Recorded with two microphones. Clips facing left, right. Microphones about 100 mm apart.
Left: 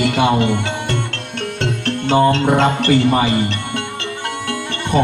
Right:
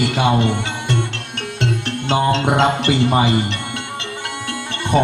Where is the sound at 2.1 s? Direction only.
20° right (ahead or behind).